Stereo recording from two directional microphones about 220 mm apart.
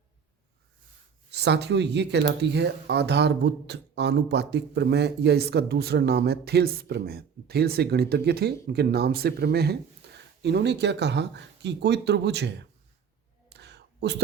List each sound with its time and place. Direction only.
1.3 s speech: 50° right (ahead or behind)
13.5 s whispering: 50° right (ahead or behind)